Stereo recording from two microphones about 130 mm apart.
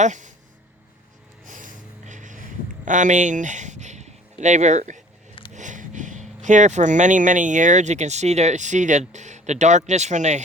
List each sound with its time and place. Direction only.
0.0 s speech: 70° right (ahead or behind)
1.5 s a sound: 85° right; by 5.0 s 70° right (ahead or behind)
5.5 s speech: 75° right (ahead or behind)